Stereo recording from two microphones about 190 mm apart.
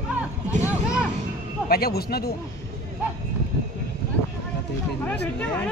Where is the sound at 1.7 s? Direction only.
55° left (ahead or behind).